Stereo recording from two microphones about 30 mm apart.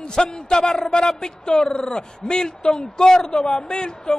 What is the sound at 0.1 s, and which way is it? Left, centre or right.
A man's voice, left.